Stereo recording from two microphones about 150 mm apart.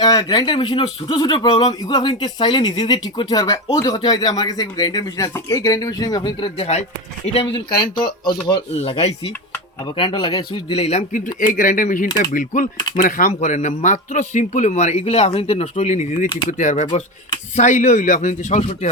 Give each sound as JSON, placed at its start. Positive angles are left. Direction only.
{"t": 0.0, "sound": "speech", "side_deg": 30}
{"t": 8.7, "sound": "speech", "side_deg": 45}